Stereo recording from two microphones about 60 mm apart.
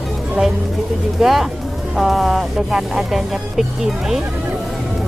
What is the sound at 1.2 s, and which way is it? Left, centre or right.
Speech, centre.